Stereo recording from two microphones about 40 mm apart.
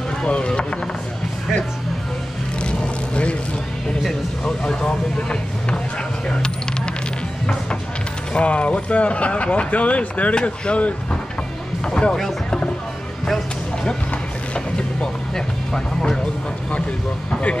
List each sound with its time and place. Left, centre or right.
0.2 s speech: left
0.5 s a sound: left
2.6 s vehicle: left
4.5 s vehicle: centre
6.2 s coin: left
8.3 s speech: left
14.5 s music: left
15.3 s music: centre